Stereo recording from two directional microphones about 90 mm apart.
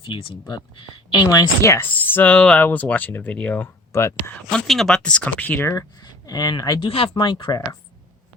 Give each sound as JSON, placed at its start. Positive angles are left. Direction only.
{"t": 0.0, "sound": "speech", "side_deg": 75}
{"t": 1.3, "sound": "speech", "side_deg": 45}
{"t": 1.7, "sound": "speech", "side_deg": 20}
{"t": 3.9, "sound": "speech", "side_deg": 30}
{"t": 4.5, "sound": "speech", "side_deg": 0}
{"t": 6.2, "sound": "speech", "side_deg": 50}
{"t": 6.8, "sound": "speech", "side_deg": 80}